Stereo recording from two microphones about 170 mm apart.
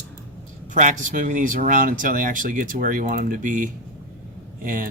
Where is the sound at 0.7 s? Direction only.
45° right (ahead or behind).